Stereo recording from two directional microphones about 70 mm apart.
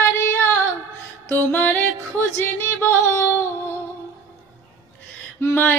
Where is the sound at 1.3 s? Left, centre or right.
Left.